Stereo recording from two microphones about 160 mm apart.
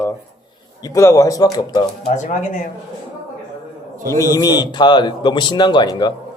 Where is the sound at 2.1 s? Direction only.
50° left (ahead or behind).